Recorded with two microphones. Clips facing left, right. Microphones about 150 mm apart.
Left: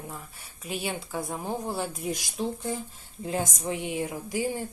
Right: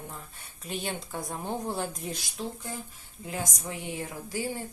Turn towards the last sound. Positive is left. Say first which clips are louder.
# left 4 dB
turn(degrees=15)  # may be behind; listen again after turning